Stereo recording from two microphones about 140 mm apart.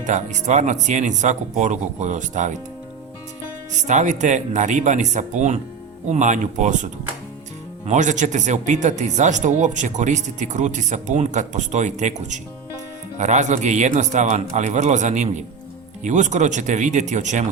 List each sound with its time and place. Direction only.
0.0 s speech: 60° right (ahead or behind)
3.8 s speech: 60° right (ahead or behind)
7.9 s speech: 60° right (ahead or behind)